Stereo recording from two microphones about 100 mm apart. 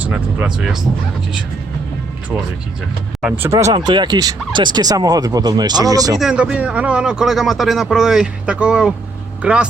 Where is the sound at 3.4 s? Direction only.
30° right (ahead or behind).